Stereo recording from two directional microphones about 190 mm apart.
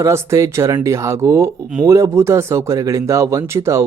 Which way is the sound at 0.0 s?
15° right (ahead or behind).